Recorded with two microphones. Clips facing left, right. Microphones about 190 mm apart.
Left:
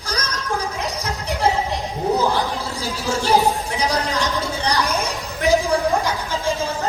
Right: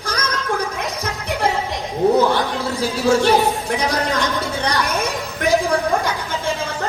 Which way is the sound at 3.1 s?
60° right (ahead or behind).